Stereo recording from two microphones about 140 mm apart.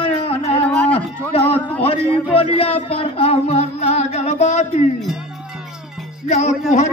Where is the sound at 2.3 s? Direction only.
45° left (ahead or behind).